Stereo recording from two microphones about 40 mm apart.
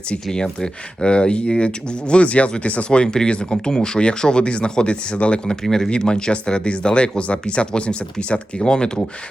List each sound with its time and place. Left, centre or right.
0.3 s speech: centre